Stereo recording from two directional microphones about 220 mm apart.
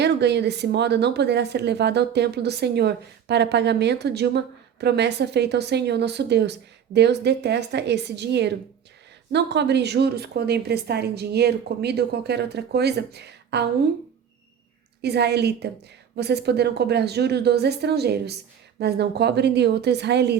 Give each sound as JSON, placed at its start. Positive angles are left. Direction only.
{"t": 0.0, "sound": "a woman's voice", "side_deg": -50}
{"t": 15.0, "sound": "a woman's voice", "side_deg": -50}